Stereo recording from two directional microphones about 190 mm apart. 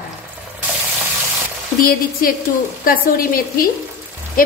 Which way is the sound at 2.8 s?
50° left (ahead or behind).